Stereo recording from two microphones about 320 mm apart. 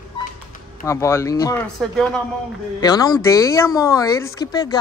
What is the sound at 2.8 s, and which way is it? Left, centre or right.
Speech, centre.